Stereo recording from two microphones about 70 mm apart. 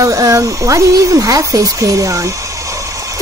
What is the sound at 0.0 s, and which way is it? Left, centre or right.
Speech, right.